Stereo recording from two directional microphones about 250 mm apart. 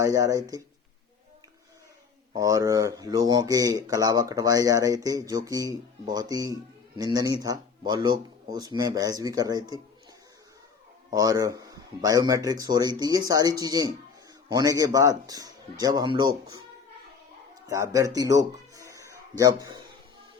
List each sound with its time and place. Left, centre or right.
0.0 s speech: centre
2.3 s speech: centre
11.1 s speech: centre
17.7 s a man's voice: centre